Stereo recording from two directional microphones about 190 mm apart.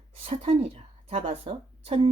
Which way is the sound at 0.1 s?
30° right (ahead or behind).